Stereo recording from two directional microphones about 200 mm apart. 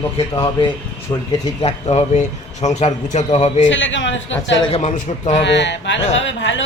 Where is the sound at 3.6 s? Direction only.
70° left (ahead or behind).